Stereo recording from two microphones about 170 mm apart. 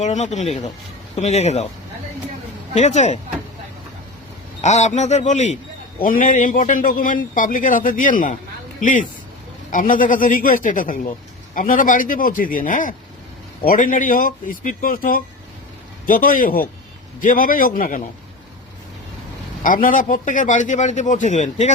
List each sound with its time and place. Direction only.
0.0 s a man's voice: 45° left (ahead or behind)
2.7 s a man's voice: 45° left (ahead or behind)
4.6 s a man's voice: 45° left (ahead or behind)
19.6 s a man's voice: 50° left (ahead or behind)